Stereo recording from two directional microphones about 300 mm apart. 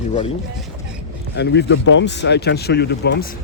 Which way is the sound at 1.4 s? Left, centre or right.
Left.